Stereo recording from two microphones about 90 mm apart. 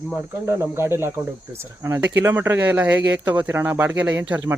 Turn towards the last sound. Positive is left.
turn(degrees=-20)  # may be behind; listen again after turning